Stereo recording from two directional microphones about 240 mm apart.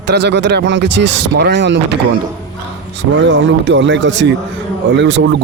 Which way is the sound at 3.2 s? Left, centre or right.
Right.